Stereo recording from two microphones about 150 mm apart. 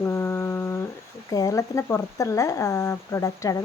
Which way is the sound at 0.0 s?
15° left (ahead or behind).